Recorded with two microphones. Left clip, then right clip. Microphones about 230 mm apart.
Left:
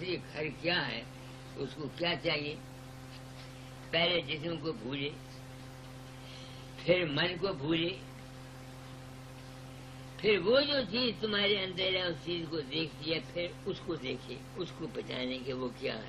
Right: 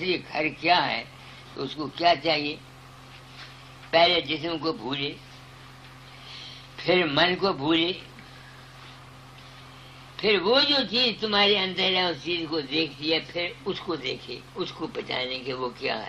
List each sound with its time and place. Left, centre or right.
0.0 s a man's voice: right
2.0 s a man's voice: right
3.9 s a man's voice: right
6.9 s a man's voice: right
10.1 s a man's voice: right
14.6 s speech: centre